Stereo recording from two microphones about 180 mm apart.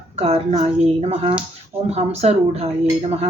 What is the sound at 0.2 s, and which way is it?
Speech, 40° right (ahead or behind).